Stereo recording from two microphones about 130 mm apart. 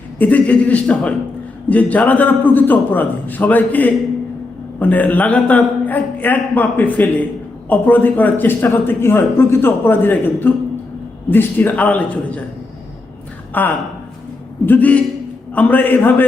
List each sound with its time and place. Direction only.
0.2 s speech: 10° left (ahead or behind)
13.5 s speech: 15° left (ahead or behind)